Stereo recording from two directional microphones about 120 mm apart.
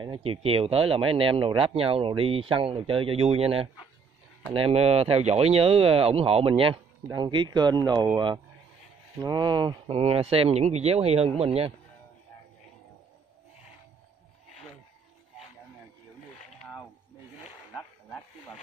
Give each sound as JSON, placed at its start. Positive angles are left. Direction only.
{"t": 0.0, "sound": "speech", "side_deg": -45}
{"t": 7.1, "sound": "speech", "side_deg": -40}
{"t": 9.2, "sound": "speech", "side_deg": -35}
{"t": 9.8, "sound": "speech", "side_deg": -55}